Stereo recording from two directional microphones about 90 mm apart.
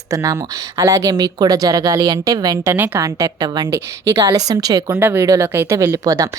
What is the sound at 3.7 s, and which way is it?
A woman's voice, 35° right (ahead or behind).